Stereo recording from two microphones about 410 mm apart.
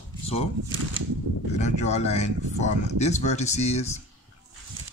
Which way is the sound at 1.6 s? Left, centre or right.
Centre.